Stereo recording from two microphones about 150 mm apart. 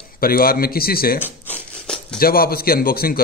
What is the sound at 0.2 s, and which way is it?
Speech, 75° left (ahead or behind).